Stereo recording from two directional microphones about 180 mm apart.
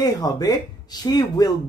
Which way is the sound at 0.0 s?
20° left (ahead or behind).